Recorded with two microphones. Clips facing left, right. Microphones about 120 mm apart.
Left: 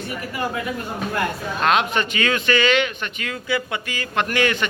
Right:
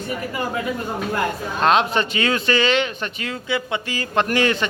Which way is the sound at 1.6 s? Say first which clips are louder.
Right 2 dB; 30° right (ahead or behind).